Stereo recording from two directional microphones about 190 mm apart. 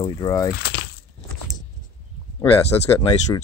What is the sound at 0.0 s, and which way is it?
Speech, 20° left (ahead or behind).